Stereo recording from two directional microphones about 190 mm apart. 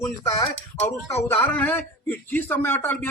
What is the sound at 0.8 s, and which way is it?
A man's voice, 15° left (ahead or behind).